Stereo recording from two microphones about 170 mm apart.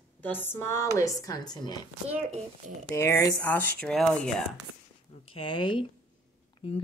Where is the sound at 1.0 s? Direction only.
20° left (ahead or behind).